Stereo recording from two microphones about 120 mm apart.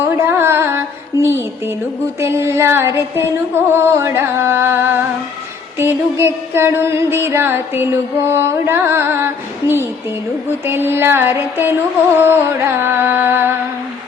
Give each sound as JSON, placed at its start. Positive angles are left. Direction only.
{"t": 0.0, "sound": "music", "side_deg": -20}